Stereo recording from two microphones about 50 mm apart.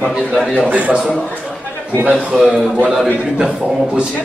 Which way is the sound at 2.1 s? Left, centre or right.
Centre.